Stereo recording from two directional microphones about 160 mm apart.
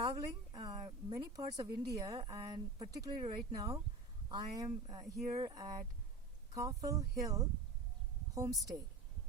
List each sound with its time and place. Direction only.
0.0 s a woman's voice: 25° right (ahead or behind)